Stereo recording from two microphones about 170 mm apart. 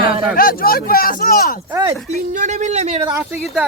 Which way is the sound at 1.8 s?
20° right (ahead or behind).